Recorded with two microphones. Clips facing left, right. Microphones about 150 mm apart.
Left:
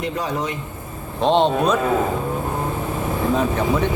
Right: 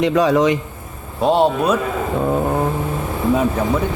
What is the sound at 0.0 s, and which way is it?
Speech, 90° right.